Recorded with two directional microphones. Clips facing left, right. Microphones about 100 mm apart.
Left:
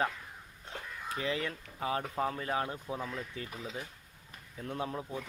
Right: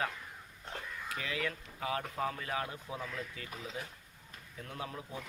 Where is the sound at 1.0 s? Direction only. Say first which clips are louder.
Left 4 dB; 30° left (ahead or behind).